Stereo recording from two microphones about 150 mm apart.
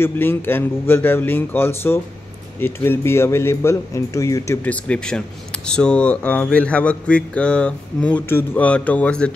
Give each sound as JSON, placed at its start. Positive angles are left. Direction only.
{"t": 0.0, "sound": "speech", "side_deg": 15}
{"t": 4.6, "sound": "speech", "side_deg": 10}